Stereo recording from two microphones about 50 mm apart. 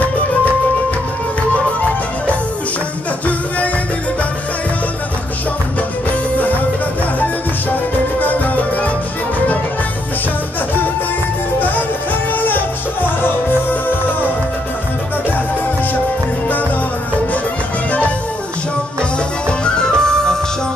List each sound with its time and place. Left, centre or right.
3.3 s music: left
8.2 s music: left
11.6 s music: left
19.6 s music: centre